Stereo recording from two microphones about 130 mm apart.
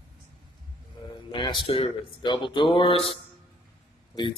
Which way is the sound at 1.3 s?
40° left (ahead or behind).